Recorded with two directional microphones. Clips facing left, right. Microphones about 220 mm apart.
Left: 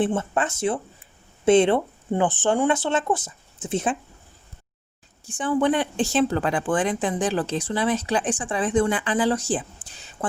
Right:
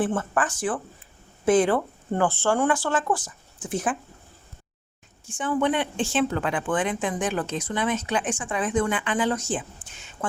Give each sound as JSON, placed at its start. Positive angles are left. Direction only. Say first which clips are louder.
{"t": 0.0, "sound": "speech", "louder": "left 2 dB", "side_deg": 25}
{"t": 5.2, "sound": "speech", "louder": "left 3 dB", "side_deg": 35}